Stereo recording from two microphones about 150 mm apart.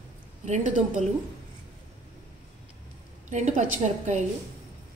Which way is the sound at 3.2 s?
50° right (ahead or behind).